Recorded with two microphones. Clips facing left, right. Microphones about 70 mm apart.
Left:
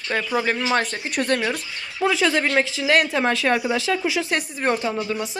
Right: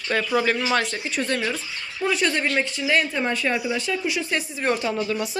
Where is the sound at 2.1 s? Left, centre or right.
Left.